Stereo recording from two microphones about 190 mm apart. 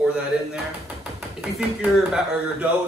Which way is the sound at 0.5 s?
5° right (ahead or behind).